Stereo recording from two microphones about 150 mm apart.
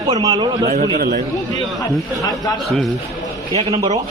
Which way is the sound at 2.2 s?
25° left (ahead or behind).